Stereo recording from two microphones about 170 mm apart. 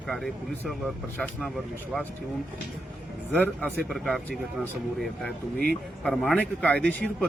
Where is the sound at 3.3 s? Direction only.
10° left (ahead or behind).